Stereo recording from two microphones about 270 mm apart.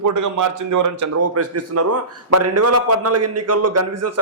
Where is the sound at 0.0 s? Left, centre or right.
Right.